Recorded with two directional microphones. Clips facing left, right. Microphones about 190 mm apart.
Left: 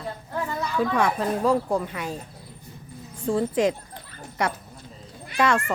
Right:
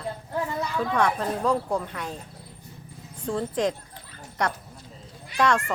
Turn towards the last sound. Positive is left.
turn(degrees=5)  # may be behind; listen again after turning